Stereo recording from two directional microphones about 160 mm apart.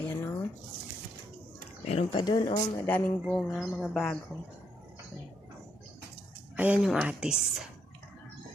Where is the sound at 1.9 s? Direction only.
40° left (ahead or behind).